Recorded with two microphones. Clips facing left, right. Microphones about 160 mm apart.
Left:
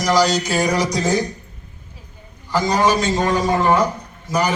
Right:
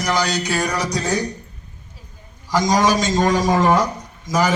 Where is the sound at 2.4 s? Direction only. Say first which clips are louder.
Even; 90° right.